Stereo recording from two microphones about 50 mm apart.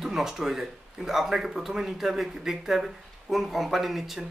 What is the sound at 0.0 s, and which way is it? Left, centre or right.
Speech, centre.